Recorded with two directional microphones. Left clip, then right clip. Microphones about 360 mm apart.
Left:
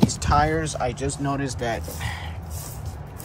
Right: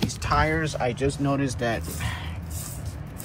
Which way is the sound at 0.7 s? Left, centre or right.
Left.